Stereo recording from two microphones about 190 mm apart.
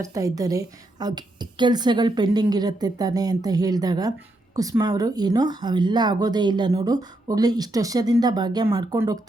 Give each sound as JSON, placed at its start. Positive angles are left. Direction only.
{"t": 0.0, "sound": "speech", "side_deg": -15}